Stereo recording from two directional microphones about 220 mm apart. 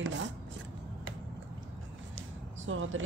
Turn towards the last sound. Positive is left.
turn(degrees=-60)  # may be behind; listen again after turning